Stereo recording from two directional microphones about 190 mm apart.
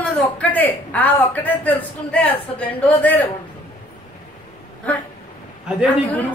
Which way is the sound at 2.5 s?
30° left (ahead or behind).